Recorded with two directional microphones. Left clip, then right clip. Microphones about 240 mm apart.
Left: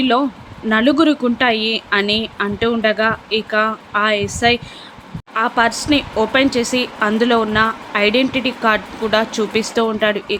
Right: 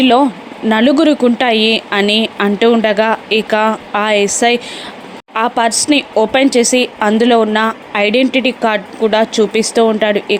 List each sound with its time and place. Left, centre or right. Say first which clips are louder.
0.0 s speech: right 6 dB; centre